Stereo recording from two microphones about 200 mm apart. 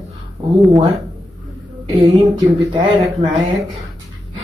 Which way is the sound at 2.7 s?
25° right (ahead or behind).